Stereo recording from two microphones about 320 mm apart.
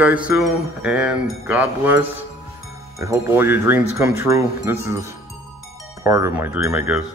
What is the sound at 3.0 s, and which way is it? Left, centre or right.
Speech, centre.